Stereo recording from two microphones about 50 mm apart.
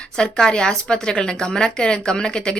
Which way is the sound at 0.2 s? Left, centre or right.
Centre.